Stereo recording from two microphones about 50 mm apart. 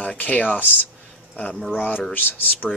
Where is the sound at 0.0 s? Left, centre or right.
Left.